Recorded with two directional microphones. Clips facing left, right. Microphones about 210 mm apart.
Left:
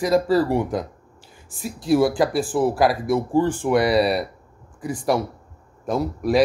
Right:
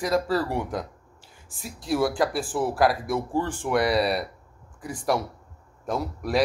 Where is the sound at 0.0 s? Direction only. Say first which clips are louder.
Left 6 dB; 5° left (ahead or behind).